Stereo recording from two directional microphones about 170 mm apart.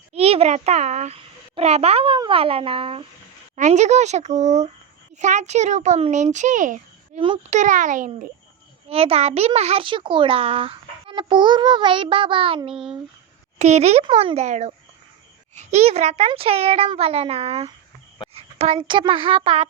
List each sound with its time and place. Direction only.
0.1 s a child's voice: 35° right (ahead or behind)
8.9 s a child's voice: 35° right (ahead or behind)